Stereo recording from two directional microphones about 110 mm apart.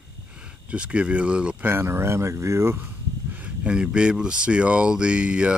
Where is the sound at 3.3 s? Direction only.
10° right (ahead or behind).